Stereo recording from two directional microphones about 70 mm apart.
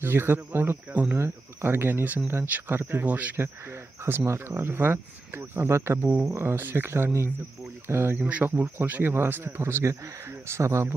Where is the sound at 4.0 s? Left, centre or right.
Right.